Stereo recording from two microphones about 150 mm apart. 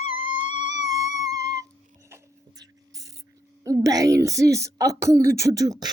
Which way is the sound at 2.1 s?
25° right (ahead or behind).